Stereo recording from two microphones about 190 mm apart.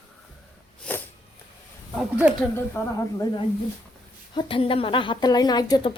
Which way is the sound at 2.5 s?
15° left (ahead or behind).